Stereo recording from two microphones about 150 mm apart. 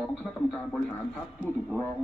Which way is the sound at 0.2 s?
5° left (ahead or behind).